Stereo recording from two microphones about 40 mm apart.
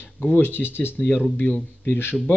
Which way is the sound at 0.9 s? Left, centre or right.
Left.